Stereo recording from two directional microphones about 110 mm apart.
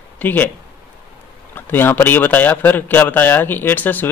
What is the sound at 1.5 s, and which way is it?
A man's voice, 20° left (ahead or behind).